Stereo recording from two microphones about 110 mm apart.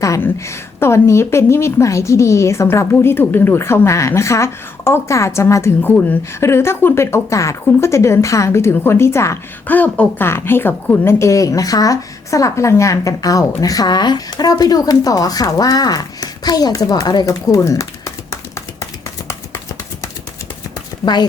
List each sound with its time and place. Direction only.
0.2 s a woman's voice: 25° left (ahead or behind)
19.3 s a sound: 25° left (ahead or behind)
21.0 s speech: 40° left (ahead or behind)